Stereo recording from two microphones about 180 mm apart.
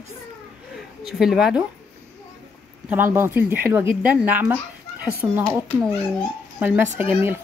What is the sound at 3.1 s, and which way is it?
A woman's voice, 10° right (ahead or behind).